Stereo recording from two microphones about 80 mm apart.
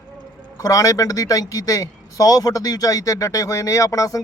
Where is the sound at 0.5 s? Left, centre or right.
Left.